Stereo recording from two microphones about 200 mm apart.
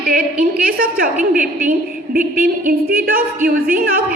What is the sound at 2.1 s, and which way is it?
A woman's voice, 45° right (ahead or behind).